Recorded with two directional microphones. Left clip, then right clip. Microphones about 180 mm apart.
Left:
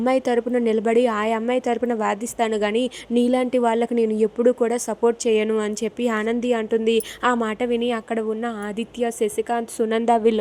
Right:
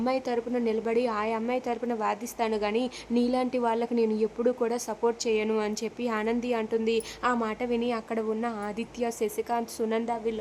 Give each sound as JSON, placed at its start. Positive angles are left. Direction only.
{"t": 0.0, "sound": "a woman's voice", "side_deg": 25}
{"t": 10.1, "sound": "speech", "side_deg": 35}